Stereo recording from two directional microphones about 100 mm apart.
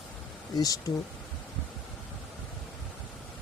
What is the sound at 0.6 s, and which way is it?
Speech, 40° left (ahead or behind).